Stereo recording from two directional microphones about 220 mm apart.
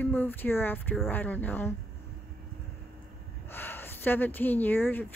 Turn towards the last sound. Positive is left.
turn(degrees=10)  # may be behind; listen again after turning